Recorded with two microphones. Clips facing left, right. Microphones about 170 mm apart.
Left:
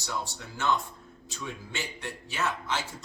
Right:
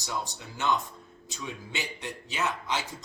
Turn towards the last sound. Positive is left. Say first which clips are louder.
# right 1 dB
turn(degrees=-15)  # may be behind; listen again after turning